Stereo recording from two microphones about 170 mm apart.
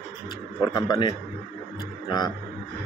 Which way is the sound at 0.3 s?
25° left (ahead or behind).